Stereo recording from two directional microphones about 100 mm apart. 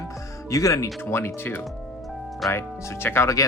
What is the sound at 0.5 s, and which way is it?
Speech, 30° left (ahead or behind).